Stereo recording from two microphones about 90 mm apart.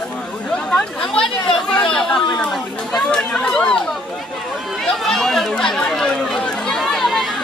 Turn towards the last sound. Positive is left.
turn(degrees=0)  # may be behind; listen again after turning